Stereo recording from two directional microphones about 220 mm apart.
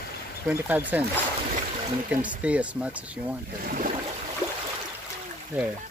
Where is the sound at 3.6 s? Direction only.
40° right (ahead or behind).